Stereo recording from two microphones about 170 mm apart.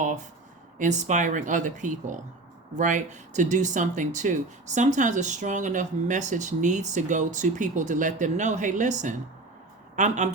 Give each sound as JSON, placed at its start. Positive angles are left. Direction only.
{"t": 0.8, "sound": "speech", "side_deg": -45}